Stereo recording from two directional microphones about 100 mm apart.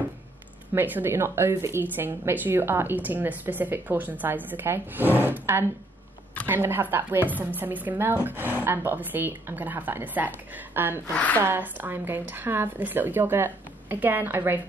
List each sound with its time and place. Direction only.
0.7 s speech: 20° right (ahead or behind)
11.1 s a woman's voice: 15° left (ahead or behind)
11.4 s speech: 20° right (ahead or behind)